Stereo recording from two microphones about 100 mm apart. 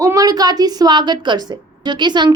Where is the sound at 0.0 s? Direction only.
35° right (ahead or behind).